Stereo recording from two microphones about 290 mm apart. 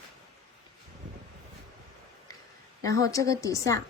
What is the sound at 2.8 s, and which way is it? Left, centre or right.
A woman's voice, centre.